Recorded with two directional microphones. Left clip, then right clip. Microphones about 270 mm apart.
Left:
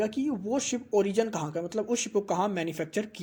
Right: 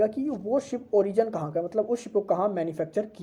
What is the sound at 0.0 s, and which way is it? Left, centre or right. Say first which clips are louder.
Speech: right 4 dB; left.